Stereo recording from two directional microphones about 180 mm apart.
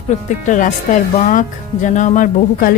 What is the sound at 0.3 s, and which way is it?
Speech, 45° left (ahead or behind).